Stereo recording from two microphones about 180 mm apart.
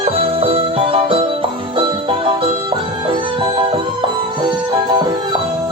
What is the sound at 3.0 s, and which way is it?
Music, 30° right (ahead or behind).